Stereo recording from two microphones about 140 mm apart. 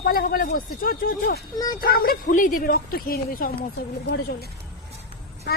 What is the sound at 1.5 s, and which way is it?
Speech, 30° left (ahead or behind).